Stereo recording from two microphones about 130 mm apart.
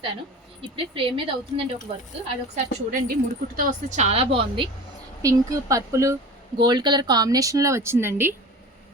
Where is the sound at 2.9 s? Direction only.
90° right; by 4.7 s 40° right (ahead or behind).